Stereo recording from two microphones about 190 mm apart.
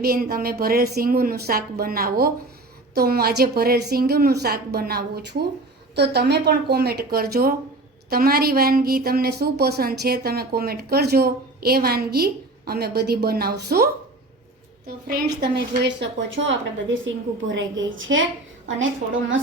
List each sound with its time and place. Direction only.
0.0 s a woman's voice: 50° right (ahead or behind); by 18.2 s 90° right